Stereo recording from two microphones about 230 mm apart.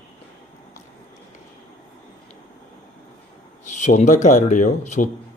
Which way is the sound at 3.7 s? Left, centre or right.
Left.